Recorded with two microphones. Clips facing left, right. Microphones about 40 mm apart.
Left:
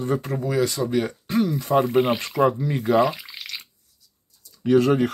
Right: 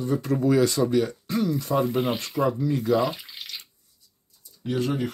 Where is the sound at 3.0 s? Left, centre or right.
Left.